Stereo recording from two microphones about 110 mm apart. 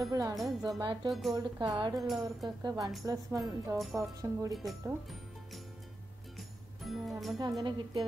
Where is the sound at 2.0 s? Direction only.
Centre (ahead or behind).